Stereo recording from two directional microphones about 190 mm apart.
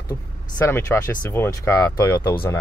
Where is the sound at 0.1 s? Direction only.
10° left (ahead or behind).